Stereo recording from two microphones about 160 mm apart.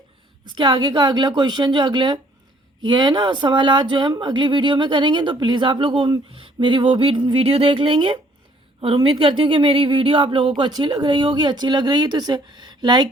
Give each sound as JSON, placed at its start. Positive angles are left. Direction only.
{"t": 0.5, "sound": "speech", "side_deg": -30}